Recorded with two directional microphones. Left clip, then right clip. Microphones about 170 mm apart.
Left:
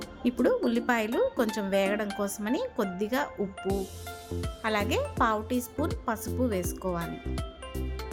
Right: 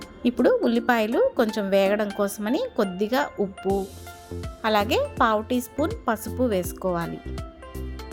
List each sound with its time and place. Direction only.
0.2 s speech: 20° right (ahead or behind)
3.6 s speech: centre (ahead or behind)
4.6 s speech: 25° right (ahead or behind)